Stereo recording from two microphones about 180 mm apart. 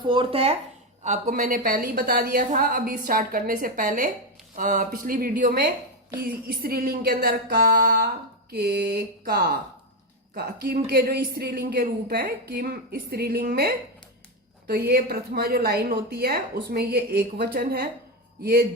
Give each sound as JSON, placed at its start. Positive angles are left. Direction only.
{"t": 0.1, "sound": "speech", "side_deg": -30}
{"t": 1.0, "sound": "a woman's voice", "side_deg": -45}